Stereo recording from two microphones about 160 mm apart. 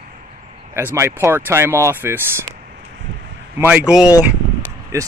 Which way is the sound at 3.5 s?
10° right (ahead or behind).